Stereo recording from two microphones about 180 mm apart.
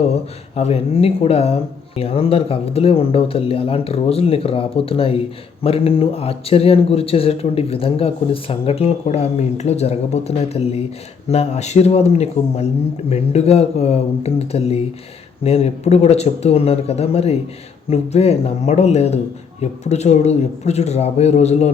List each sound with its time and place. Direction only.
0.5 s speech: 35° left (ahead or behind)